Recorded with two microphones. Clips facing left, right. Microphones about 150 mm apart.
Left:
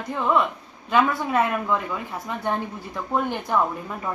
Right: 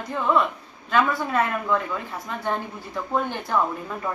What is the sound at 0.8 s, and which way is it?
Speech, 15° left (ahead or behind).